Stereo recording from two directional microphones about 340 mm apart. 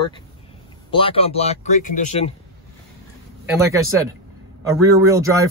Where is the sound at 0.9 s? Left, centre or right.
Centre.